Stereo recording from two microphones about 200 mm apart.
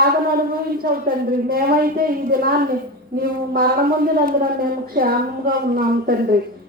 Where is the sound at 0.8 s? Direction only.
45° right (ahead or behind).